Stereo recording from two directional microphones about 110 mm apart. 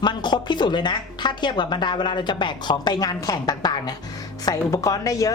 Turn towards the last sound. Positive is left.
turn(degrees=30)  # may be behind; listen again after turning